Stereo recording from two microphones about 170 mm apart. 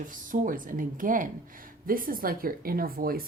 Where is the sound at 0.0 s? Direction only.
50° right (ahead or behind).